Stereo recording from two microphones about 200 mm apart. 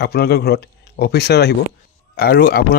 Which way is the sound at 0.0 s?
50° left (ahead or behind).